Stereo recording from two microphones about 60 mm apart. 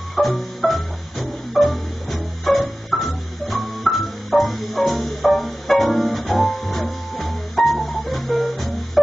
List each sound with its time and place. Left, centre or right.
0.1 s music: centre